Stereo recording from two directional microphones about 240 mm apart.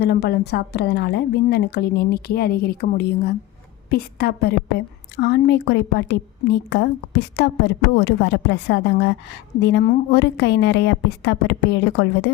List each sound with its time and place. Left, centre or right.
0.0 s a woman's voice: left